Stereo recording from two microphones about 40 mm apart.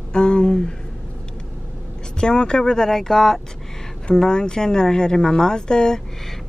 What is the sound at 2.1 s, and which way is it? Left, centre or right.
Speech, left.